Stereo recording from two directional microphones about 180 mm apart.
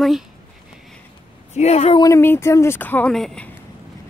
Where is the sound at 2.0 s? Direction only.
15° left (ahead or behind).